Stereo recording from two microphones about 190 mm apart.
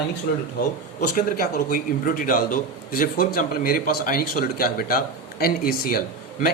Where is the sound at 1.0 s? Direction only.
50° left (ahead or behind).